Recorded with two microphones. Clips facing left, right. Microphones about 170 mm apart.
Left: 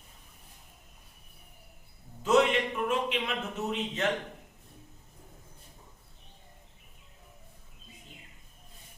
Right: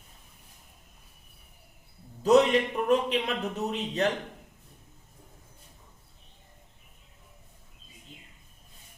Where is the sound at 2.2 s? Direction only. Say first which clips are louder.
Right 4 dB; 40° right (ahead or behind).